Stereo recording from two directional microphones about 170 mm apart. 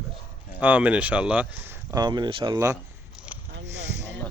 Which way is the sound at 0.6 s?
10° right (ahead or behind).